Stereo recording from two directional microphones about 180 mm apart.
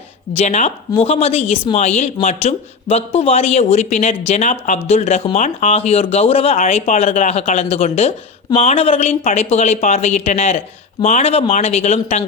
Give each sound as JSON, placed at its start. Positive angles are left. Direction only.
{"t": 0.3, "sound": "speech", "side_deg": 40}